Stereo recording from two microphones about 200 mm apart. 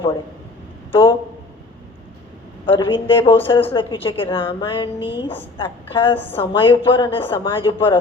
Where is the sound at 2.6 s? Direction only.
25° left (ahead or behind).